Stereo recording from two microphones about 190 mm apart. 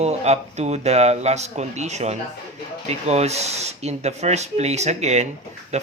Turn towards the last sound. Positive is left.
turn(degrees=-35)  # may be behind; listen again after turning